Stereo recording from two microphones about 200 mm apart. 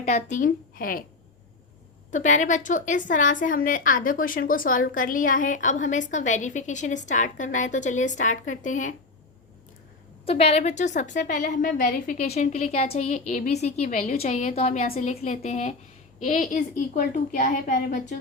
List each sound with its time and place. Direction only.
0.0 s a woman's voice: 35° left (ahead or behind)
2.0 s a woman's voice: 40° left (ahead or behind)
10.2 s a woman's voice: 30° left (ahead or behind)